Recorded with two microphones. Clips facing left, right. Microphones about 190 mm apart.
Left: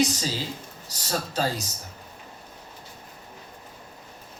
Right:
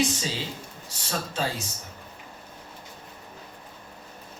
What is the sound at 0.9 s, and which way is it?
Speech, 40° left (ahead or behind).